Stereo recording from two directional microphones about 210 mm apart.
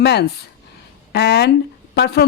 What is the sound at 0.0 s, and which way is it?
Speech, 50° left (ahead or behind).